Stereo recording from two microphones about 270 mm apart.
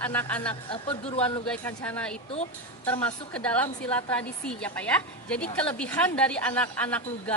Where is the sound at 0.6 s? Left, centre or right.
Centre.